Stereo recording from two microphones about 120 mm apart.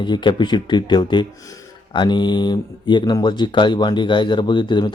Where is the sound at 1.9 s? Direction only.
40° left (ahead or behind).